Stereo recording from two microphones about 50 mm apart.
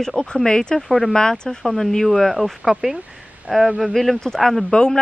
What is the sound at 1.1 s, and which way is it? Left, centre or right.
Speech, centre.